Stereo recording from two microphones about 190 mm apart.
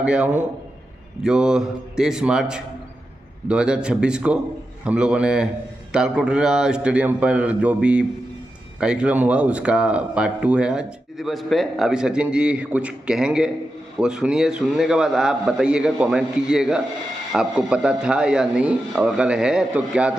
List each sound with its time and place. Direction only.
0.0 s a man's voice: 5° right (ahead or behind)